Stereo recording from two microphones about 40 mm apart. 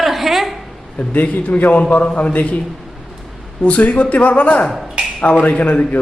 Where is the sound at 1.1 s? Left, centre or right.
Left.